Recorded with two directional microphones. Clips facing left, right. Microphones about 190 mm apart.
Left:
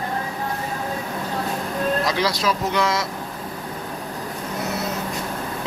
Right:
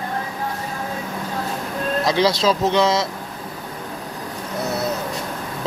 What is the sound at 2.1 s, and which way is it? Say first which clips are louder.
Speech: right 4 dB; 25° right (ahead or behind).